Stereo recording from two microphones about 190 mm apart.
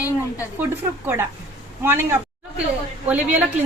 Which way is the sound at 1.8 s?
10° right (ahead or behind).